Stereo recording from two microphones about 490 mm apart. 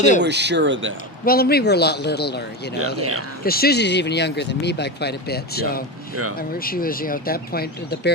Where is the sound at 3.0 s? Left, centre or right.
Right.